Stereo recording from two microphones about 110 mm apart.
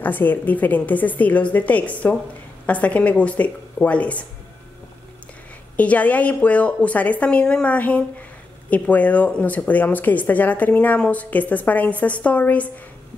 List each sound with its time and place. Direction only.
0.0 s speech: 15° left (ahead or behind)
5.8 s speech: 15° left (ahead or behind)